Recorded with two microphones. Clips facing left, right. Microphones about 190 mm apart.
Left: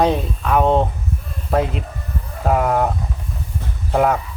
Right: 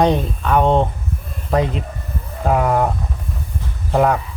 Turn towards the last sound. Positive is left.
turn(degrees=0)  # may be behind; listen again after turning